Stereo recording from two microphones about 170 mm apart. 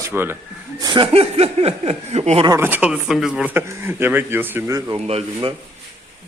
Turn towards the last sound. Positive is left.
turn(degrees=-35)  # may be behind; listen again after turning